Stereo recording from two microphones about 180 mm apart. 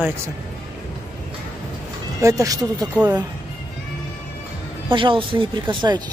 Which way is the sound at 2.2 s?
15° right (ahead or behind).